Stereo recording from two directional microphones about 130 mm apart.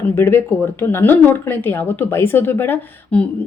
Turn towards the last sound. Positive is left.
turn(degrees=15)  # may be behind; listen again after turning